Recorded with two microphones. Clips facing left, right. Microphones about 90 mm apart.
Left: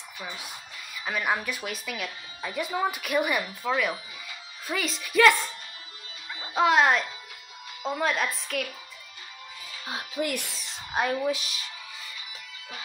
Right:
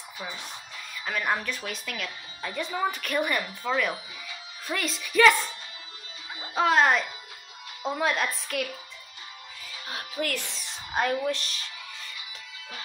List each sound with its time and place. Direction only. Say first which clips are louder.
1.0 s speech: even; 5° left (ahead or behind)
6.5 s speech: left 1 dB; centre (ahead or behind)
9.8 s speech: left 2 dB; 20° left (ahead or behind)
11.2 s speech: left 1 dB; 5° left (ahead or behind)